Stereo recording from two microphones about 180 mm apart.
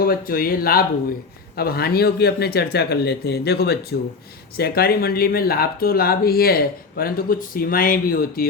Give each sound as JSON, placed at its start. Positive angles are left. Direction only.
{"t": 0.0, "sound": "speech", "side_deg": 55}